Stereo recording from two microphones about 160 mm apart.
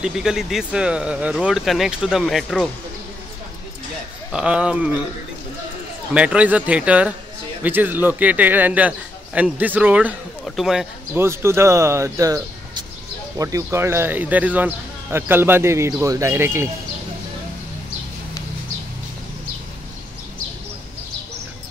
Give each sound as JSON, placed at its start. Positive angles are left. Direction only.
{"t": 0.0, "sound": "speech", "side_deg": -5}
{"t": 4.3, "sound": "speech", "side_deg": -5}
{"t": 6.1, "sound": "speech", "side_deg": -10}
{"t": 11.1, "sound": "speech", "side_deg": -15}
{"t": 13.4, "sound": "speech", "side_deg": -20}